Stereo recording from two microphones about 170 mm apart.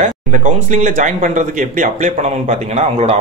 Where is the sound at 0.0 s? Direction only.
45° right (ahead or behind).